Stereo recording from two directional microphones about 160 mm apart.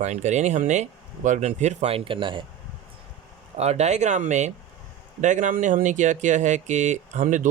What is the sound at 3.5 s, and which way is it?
Speech, 45° right (ahead or behind).